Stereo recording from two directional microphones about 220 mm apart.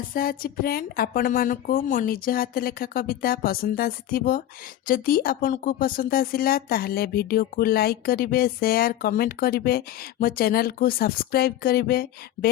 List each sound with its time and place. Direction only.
0.1 s a woman's voice: 40° left (ahead or behind)